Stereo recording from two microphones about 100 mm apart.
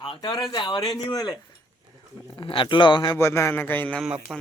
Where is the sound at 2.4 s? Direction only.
55° left (ahead or behind).